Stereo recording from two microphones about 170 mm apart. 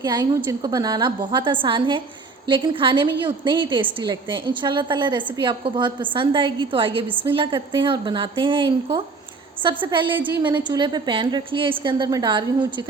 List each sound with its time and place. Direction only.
0.0 s a woman's voice: 25° right (ahead or behind)